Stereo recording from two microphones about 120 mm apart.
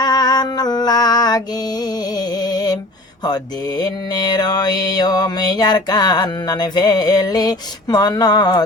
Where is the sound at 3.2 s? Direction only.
35° left (ahead or behind).